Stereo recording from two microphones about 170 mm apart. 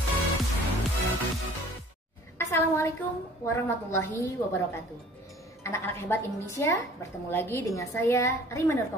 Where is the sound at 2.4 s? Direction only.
15° left (ahead or behind).